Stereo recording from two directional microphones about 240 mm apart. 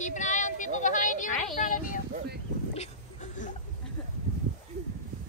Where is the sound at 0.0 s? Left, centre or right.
Left.